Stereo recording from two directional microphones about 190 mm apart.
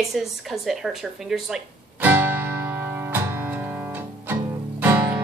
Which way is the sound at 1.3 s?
5° right (ahead or behind).